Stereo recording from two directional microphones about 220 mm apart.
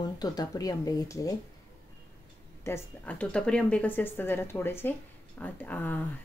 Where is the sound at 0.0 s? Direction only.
15° left (ahead or behind).